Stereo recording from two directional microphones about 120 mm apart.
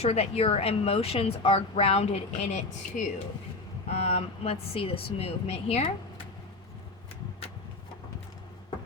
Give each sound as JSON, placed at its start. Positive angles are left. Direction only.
{"t": 0.0, "sound": "a woman's voice", "side_deg": 55}
{"t": 3.8, "sound": "a woman's voice", "side_deg": 60}